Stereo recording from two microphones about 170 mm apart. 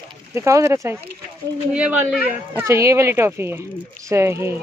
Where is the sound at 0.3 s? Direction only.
15° right (ahead or behind).